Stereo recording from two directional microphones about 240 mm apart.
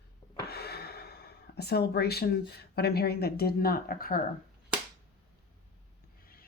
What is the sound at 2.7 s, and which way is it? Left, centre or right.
Speech, left.